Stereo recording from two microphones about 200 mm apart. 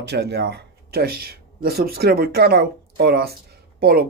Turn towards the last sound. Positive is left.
turn(degrees=-50)  # may be behind; listen again after turning